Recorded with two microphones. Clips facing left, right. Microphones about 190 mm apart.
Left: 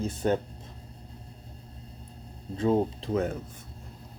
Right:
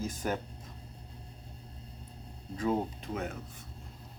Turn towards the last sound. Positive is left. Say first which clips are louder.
# left 9 dB
turn(degrees=40)  # may be behind; listen again after turning